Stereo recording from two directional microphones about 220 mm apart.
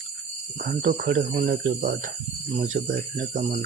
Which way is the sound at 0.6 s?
40° right (ahead or behind).